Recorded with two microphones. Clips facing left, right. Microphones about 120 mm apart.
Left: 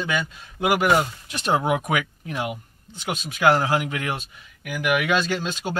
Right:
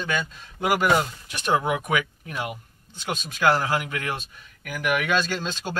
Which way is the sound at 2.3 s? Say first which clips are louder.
Left 3 dB; 20° left (ahead or behind).